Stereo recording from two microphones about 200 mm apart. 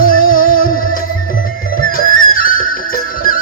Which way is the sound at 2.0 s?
45° left (ahead or behind).